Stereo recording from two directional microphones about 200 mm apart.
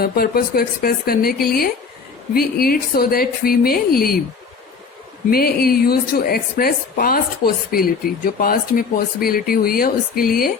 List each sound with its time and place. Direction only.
0.0 s a woman's voice: 50° left (ahead or behind)
5.3 s a woman's voice: 50° left (ahead or behind)